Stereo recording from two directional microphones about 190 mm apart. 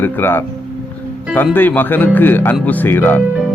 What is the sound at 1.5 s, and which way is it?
Speech, 10° left (ahead or behind).